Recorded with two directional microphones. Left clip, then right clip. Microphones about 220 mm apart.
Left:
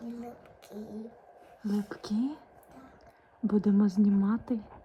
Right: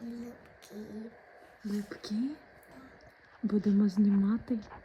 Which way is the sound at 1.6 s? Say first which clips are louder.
Left 4 dB; 5° right (ahead or behind).